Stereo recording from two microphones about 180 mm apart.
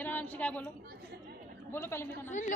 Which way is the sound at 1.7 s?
15° left (ahead or behind).